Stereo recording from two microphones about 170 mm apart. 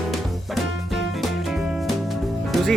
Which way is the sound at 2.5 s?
Centre (ahead or behind).